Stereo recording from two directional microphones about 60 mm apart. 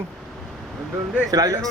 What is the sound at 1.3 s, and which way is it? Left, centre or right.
Speech, right.